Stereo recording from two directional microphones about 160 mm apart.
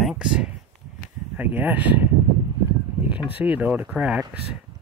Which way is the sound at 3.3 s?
10° right (ahead or behind).